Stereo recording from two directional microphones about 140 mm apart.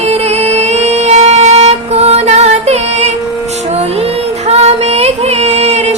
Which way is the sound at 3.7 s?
50° right (ahead or behind).